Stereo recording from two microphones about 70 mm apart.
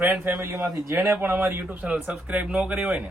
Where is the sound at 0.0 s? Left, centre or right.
Right.